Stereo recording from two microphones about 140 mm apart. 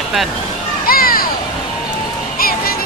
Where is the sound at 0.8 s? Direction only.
90° left.